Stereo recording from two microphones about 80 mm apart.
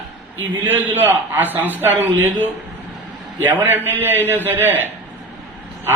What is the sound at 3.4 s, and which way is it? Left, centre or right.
A man's voice, right.